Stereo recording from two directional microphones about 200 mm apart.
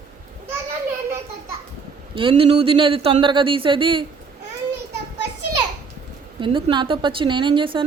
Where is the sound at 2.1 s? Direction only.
25° right (ahead or behind).